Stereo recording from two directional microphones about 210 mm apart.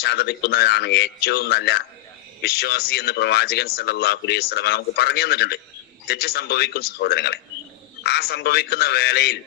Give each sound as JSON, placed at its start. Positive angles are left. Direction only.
{"t": 0.0, "sound": "speech", "side_deg": 50}